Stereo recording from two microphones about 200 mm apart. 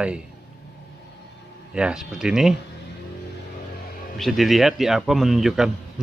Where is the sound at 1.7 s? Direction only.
5° right (ahead or behind).